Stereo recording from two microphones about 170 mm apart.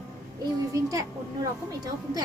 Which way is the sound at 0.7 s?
20° right (ahead or behind).